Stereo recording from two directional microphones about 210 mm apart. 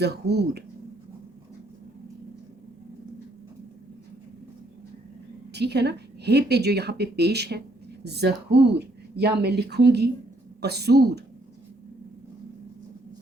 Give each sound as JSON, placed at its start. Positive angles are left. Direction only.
{"t": 0.0, "sound": "speech", "side_deg": -50}
{"t": 5.5, "sound": "speech", "side_deg": -50}